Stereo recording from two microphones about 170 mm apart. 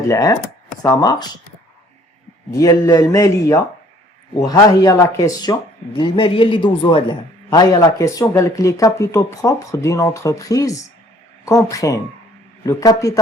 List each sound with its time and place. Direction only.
0.1 s speech: 20° left (ahead or behind)
2.6 s speech: 20° left (ahead or behind)